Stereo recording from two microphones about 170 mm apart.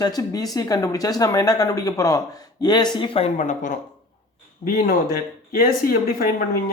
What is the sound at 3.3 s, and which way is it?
Speech, 50° left (ahead or behind).